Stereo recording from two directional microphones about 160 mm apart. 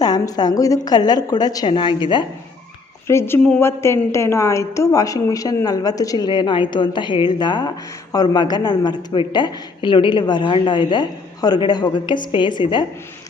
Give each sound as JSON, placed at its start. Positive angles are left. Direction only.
{"t": 0.0, "sound": "a woman's voice", "side_deg": 25}
{"t": 3.1, "sound": "a woman's voice", "side_deg": 15}